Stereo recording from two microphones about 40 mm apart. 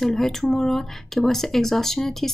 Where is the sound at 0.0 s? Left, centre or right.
Centre.